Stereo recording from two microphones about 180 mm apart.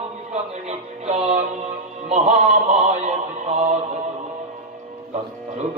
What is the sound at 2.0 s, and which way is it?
Speech, 40° right (ahead or behind).